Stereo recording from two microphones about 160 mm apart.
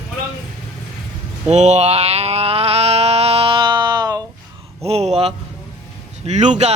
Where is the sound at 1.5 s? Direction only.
45° right (ahead or behind); by 4.2 s 25° right (ahead or behind).